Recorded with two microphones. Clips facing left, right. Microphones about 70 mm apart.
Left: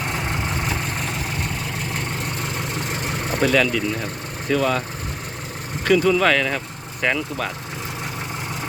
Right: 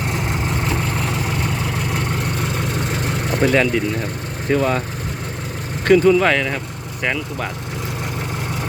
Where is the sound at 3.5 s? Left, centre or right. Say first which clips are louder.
Right 2 dB; centre.